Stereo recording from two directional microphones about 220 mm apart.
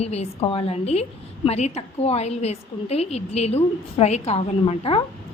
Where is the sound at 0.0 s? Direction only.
30° left (ahead or behind).